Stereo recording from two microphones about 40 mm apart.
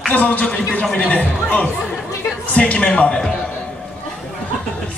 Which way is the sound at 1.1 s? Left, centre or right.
Left.